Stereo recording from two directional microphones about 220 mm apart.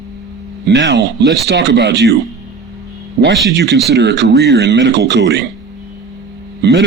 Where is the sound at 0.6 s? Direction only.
50° right (ahead or behind).